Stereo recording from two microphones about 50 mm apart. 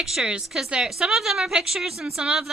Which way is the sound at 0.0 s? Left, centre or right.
Centre.